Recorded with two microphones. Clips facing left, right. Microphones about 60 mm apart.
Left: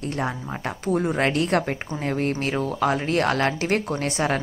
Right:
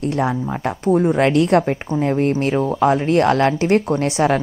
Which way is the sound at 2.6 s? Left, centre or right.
Right.